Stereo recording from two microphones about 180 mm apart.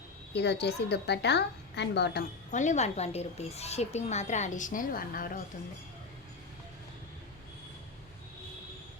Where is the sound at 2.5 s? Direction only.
40° left (ahead or behind).